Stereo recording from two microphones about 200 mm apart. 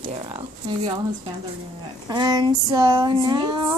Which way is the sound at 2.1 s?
20° right (ahead or behind).